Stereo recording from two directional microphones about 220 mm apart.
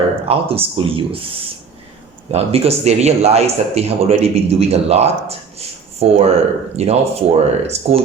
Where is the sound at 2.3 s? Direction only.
30° right (ahead or behind).